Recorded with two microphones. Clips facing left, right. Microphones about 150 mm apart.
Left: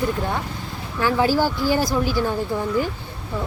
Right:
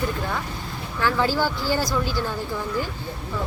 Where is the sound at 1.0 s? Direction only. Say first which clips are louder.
Left 3 dB; 15° left (ahead or behind).